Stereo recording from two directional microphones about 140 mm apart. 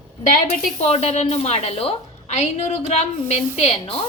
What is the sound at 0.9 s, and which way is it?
A woman's voice, 50° left (ahead or behind).